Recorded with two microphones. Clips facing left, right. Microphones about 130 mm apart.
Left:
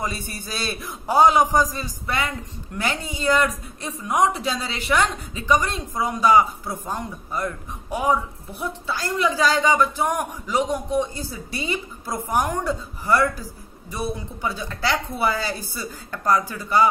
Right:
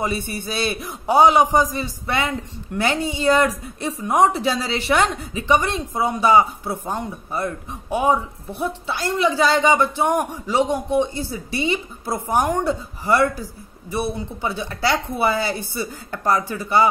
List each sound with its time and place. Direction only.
0.0 s speech: 25° right (ahead or behind)
14.4 s speech: 20° right (ahead or behind)